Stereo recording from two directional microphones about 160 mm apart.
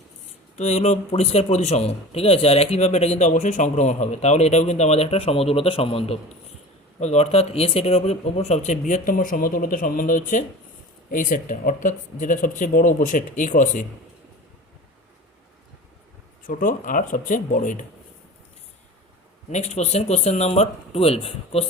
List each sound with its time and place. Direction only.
0.5 s a man's voice: 45° left (ahead or behind)
8.9 s speech: 55° left (ahead or behind)
16.5 s speech: 60° left (ahead or behind)
19.5 s speech: 45° left (ahead or behind)